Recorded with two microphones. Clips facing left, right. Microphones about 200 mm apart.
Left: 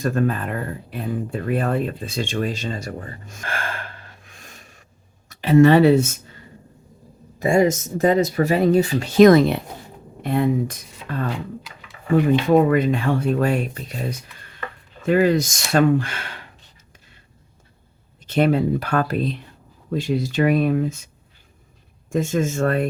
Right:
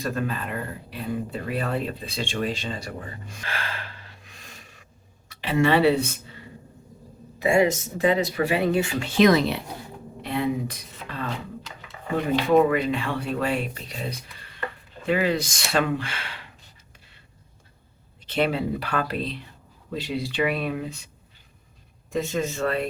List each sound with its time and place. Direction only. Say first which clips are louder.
0.0 s speech: left 6 dB; 50° left (ahead or behind)
7.4 s speech: left 3 dB; 45° left (ahead or behind)
12.5 s speech: even; 40° left (ahead or behind)
18.3 s speech: left 6 dB; 45° left (ahead or behind)
22.1 s speech: left 5 dB; 50° left (ahead or behind)